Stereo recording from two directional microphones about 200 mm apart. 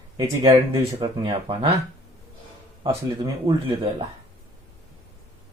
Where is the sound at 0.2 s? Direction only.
15° right (ahead or behind).